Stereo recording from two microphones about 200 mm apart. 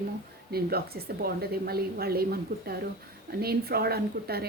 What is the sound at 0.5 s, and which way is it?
A woman's voice, 50° right (ahead or behind).